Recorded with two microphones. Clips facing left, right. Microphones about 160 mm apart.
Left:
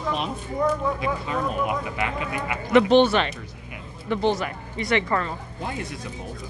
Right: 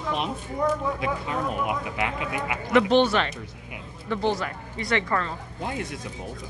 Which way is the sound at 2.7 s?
20° left (ahead or behind).